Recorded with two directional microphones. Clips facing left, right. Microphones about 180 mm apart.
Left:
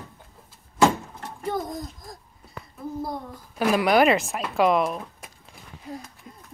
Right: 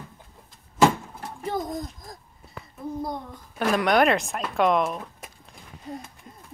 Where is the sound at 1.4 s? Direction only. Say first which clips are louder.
Even; centre (ahead or behind).